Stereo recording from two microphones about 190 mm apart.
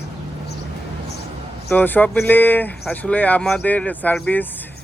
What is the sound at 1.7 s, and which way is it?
Speech, 10° left (ahead or behind).